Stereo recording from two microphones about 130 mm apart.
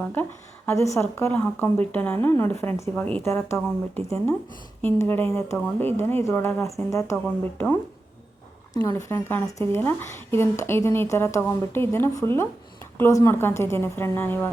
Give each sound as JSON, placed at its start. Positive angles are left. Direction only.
{"t": 0.0, "sound": "a woman's voice", "side_deg": 15}
{"t": 8.7, "sound": "speech", "side_deg": 25}